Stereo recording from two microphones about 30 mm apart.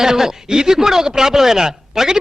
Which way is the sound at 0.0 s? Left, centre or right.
Centre.